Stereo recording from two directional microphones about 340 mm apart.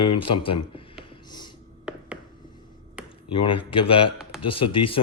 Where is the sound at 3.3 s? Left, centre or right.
Centre.